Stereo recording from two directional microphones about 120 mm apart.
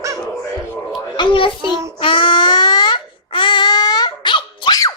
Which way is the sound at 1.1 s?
40° left (ahead or behind).